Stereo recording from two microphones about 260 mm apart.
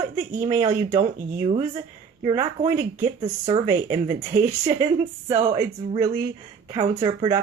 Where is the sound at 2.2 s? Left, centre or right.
Centre.